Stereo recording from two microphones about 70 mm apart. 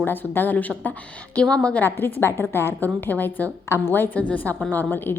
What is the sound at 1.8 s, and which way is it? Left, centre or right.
A woman's voice, left.